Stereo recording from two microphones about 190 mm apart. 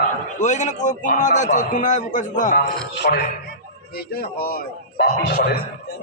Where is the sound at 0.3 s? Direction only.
40° left (ahead or behind).